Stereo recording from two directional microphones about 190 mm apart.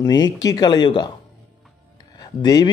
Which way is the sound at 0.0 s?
20° left (ahead or behind).